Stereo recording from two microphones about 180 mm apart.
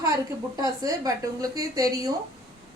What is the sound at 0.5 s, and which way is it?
A woman's voice, 20° right (ahead or behind).